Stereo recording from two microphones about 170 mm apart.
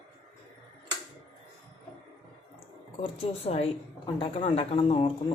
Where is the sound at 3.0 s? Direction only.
35° left (ahead or behind).